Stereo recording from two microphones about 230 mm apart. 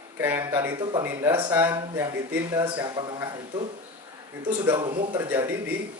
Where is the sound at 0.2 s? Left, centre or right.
Centre.